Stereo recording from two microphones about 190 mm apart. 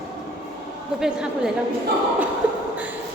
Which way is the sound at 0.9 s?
5° right (ahead or behind).